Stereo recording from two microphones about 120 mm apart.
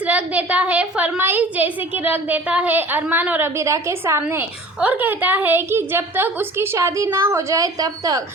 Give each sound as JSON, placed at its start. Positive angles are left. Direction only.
{"t": 0.0, "sound": "a woman's voice", "side_deg": -10}